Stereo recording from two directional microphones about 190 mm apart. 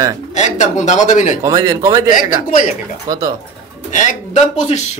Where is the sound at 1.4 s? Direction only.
20° right (ahead or behind).